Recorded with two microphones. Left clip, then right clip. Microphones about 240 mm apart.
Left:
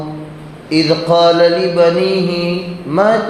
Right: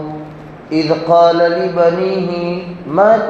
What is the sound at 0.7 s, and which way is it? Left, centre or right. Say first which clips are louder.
Mantra: even; left.